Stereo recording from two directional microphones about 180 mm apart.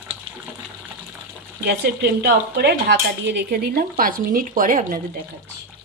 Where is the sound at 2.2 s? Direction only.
65° right (ahead or behind).